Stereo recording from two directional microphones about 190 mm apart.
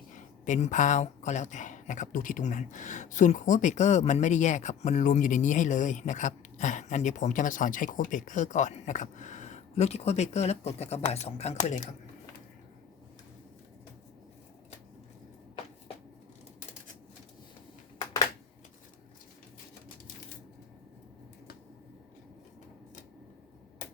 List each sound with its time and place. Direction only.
0.1 s speech: 40° left (ahead or behind)